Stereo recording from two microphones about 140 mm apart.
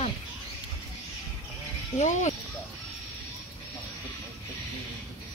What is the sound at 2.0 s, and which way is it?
Speech, 60° left (ahead or behind).